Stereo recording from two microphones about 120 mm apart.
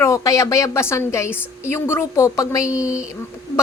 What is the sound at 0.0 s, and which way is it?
Speech, 25° left (ahead or behind).